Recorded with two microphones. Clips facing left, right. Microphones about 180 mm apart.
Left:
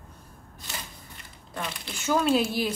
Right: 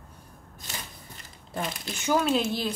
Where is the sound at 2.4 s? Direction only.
10° left (ahead or behind).